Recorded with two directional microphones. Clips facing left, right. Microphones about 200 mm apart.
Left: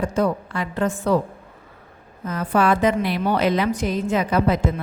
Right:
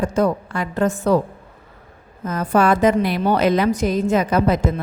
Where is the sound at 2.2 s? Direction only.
45° right (ahead or behind).